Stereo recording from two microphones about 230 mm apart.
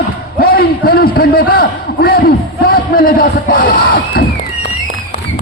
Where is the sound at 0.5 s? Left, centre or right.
Left.